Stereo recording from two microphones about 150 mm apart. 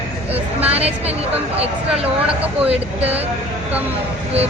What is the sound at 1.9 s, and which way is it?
Speech, 10° right (ahead or behind).